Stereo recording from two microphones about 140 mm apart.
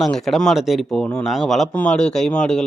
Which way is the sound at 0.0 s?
Centre (ahead or behind).